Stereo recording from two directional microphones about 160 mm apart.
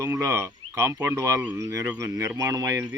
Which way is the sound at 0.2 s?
20° right (ahead or behind).